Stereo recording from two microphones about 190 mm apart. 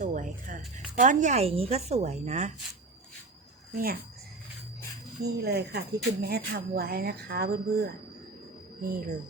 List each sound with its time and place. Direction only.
0.0 s music: 40° right (ahead or behind)
0.9 s speech: 40° right (ahead or behind)
3.7 s speech: 50° right (ahead or behind)
5.2 s speech: 60° right (ahead or behind)